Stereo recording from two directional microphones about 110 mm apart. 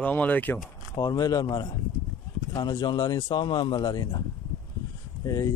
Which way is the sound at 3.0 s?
30° left (ahead or behind).